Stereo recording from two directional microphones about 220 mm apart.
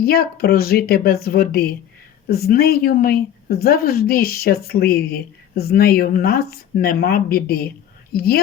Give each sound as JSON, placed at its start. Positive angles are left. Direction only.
{"t": 0.0, "sound": "speech", "side_deg": 45}